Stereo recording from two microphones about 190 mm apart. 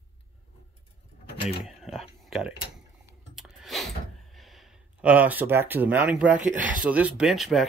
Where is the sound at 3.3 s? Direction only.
Centre (ahead or behind).